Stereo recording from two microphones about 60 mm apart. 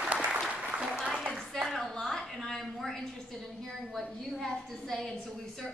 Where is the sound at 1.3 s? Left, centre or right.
Centre.